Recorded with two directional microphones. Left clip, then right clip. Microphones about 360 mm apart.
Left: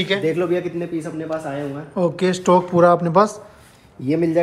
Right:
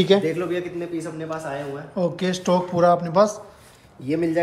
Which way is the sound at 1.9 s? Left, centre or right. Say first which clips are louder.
Left 5 dB; centre.